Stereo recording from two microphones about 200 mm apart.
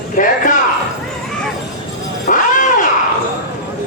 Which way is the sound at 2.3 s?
40° left (ahead or behind).